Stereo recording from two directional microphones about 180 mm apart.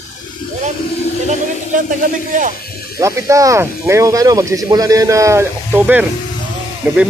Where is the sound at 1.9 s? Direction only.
45° right (ahead or behind).